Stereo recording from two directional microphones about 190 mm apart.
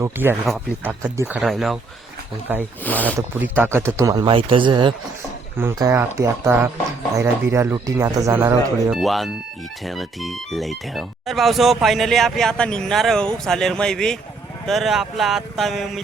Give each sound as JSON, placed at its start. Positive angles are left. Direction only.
{"t": 0.0, "sound": "speech", "side_deg": -10}
{"t": 0.4, "sound": "speech", "side_deg": 0}
{"t": 1.0, "sound": "speech", "side_deg": -15}
{"t": 1.4, "sound": "speech", "side_deg": 0}
{"t": 2.8, "sound": "speech", "side_deg": 10}
{"t": 3.6, "sound": "a man's voice", "side_deg": -15}
{"t": 5.5, "sound": "speech", "side_deg": -15}
{"t": 8.9, "sound": "speech", "side_deg": 0}